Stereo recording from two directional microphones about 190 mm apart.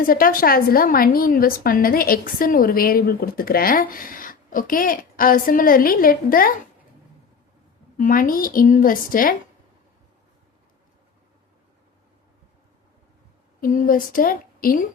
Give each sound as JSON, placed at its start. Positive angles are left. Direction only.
{"t": 0.0, "sound": "a woman's voice", "side_deg": 45}
{"t": 7.9, "sound": "a woman's voice", "side_deg": 45}
{"t": 13.6, "sound": "a woman's voice", "side_deg": 45}